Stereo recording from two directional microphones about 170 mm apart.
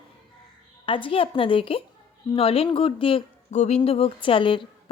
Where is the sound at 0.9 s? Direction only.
30° left (ahead or behind).